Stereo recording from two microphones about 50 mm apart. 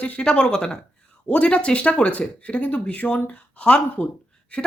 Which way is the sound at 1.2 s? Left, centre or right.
Left.